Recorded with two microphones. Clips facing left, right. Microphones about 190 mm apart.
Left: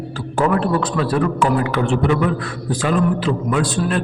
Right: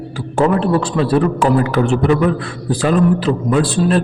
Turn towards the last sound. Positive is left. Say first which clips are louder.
# right 5 dB
turn(degrees=-35)  # may be behind; listen again after turning